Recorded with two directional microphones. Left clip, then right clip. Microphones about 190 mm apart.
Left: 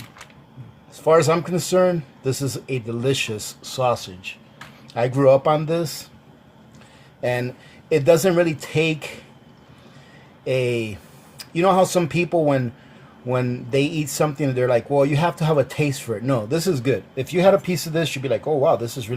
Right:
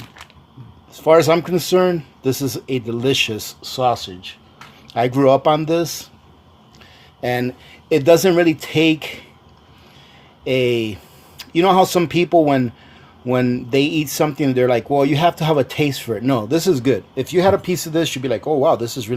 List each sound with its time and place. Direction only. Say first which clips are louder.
0.9 s speech: right 4 dB; 40° right (ahead or behind)
7.2 s speech: right 3 dB; 40° right (ahead or behind)
10.4 s speech: right 4 dB; 40° right (ahead or behind)